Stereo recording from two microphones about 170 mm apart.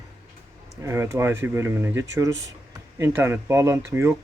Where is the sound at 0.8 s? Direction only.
15° right (ahead or behind).